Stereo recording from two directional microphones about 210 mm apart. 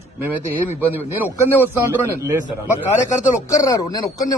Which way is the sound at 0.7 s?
10° right (ahead or behind).